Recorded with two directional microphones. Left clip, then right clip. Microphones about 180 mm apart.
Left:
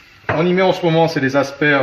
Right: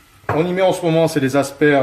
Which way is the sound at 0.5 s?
50° right (ahead or behind).